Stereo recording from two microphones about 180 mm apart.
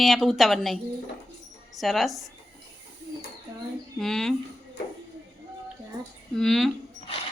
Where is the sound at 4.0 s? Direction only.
Centre (ahead or behind).